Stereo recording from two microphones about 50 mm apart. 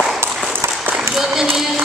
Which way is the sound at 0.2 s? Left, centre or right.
Right.